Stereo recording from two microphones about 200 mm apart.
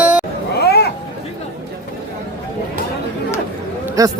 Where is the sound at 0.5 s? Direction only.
55° left (ahead or behind).